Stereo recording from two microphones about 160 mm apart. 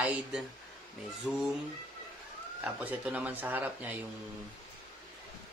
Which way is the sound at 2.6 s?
5° right (ahead or behind).